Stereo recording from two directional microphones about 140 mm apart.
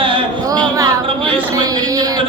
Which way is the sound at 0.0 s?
40° right (ahead or behind).